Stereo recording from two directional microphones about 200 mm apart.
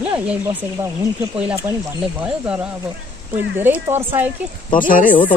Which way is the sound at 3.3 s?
10° right (ahead or behind).